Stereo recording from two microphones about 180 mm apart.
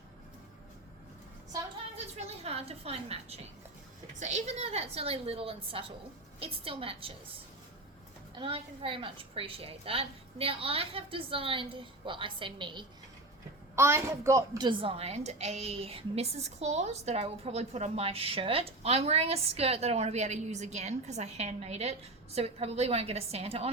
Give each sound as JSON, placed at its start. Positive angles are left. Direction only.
{"t": 2.1, "sound": "a woman's voice", "side_deg": -35}
{"t": 8.4, "sound": "a woman's voice", "side_deg": -30}
{"t": 13.7, "sound": "a child's voice", "side_deg": -15}
{"t": 14.7, "sound": "a woman's voice", "side_deg": -30}